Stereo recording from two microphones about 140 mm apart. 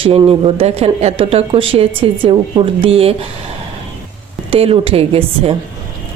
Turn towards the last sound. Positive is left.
turn(degrees=-45)  # may be behind; listen again after turning